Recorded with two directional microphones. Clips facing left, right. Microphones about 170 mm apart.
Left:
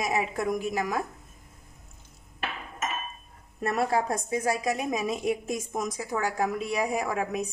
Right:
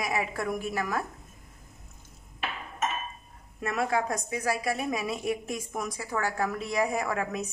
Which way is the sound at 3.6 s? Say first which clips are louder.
Left 2 dB; 35° left (ahead or behind).